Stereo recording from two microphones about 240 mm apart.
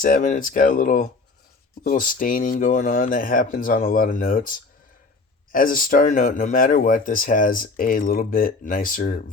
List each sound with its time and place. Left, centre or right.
0.0 s speech: left